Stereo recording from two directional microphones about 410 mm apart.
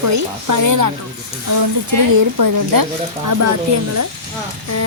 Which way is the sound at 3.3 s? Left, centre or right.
Right.